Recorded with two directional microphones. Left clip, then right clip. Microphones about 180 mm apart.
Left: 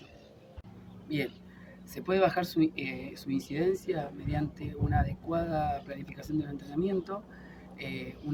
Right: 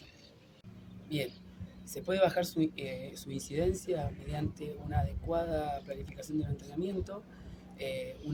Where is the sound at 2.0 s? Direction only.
25° right (ahead or behind).